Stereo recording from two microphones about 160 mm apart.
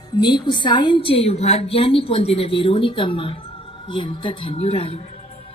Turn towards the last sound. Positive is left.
turn(degrees=35)  # may be behind; listen again after turning